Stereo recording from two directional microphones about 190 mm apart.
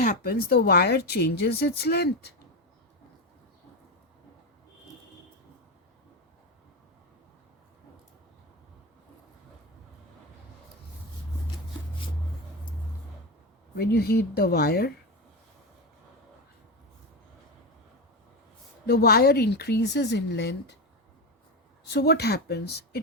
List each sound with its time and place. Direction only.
0.0 s speech: 45° left (ahead or behind)
13.7 s speech: 55° left (ahead or behind)
18.9 s speech: 55° left (ahead or behind)
21.9 s speech: 60° left (ahead or behind)